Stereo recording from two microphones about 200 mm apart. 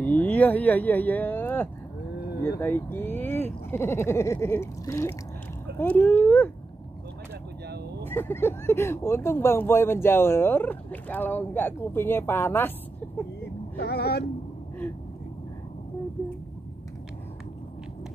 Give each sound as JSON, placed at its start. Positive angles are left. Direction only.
{"t": 0.0, "sound": "speech", "side_deg": 10}
{"t": 8.0, "sound": "speech", "side_deg": 10}
{"t": 13.7, "sound": "speech", "side_deg": 55}